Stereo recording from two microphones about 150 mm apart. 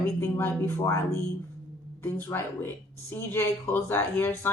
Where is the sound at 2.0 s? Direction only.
15° left (ahead or behind).